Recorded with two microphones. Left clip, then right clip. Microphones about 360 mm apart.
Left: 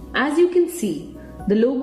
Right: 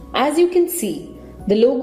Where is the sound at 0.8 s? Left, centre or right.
Right.